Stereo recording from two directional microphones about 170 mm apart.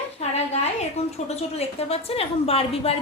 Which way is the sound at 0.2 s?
40° left (ahead or behind).